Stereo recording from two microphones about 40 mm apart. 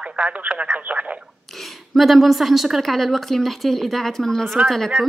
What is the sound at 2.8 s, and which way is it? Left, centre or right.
Speech, centre.